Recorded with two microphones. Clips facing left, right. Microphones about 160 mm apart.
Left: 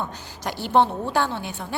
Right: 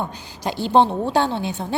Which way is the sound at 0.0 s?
15° right (ahead or behind).